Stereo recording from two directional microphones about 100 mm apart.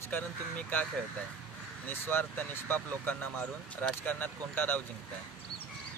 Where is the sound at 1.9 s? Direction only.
20° left (ahead or behind).